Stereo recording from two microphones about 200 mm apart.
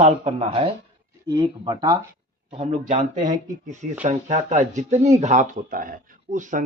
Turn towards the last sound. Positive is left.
turn(degrees=-40)  # may be behind; listen again after turning